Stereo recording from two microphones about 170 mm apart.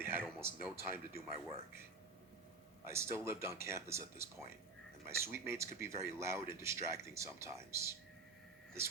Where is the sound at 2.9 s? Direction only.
15° right (ahead or behind).